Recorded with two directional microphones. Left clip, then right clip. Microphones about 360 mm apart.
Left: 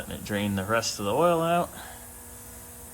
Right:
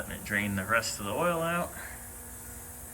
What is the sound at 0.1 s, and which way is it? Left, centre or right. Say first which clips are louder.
Speech: left 1 dB; centre.